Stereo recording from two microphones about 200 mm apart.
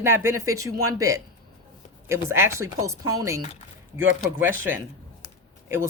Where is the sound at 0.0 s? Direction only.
15° right (ahead or behind).